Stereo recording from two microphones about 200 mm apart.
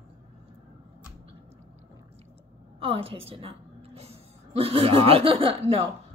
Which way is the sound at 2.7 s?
25° right (ahead or behind).